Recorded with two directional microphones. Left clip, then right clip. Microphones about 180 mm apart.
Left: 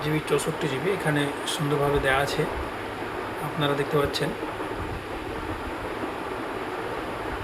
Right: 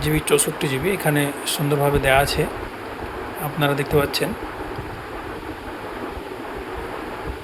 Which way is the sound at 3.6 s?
45° right (ahead or behind).